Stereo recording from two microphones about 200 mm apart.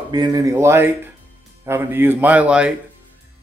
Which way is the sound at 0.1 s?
20° right (ahead or behind).